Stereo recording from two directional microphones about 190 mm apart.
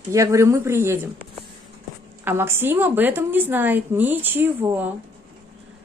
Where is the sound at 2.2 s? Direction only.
15° right (ahead or behind).